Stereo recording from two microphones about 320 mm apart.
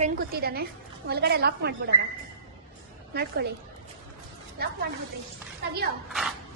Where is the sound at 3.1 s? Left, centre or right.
Right.